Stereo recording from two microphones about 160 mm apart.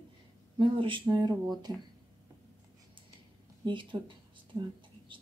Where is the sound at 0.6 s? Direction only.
30° right (ahead or behind).